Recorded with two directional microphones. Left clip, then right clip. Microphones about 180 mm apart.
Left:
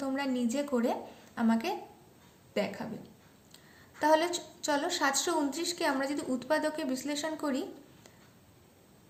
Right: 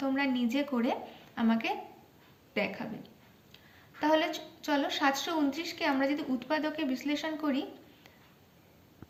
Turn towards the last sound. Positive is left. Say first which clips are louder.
# even
turn(degrees=50)  # may be behind; listen again after turning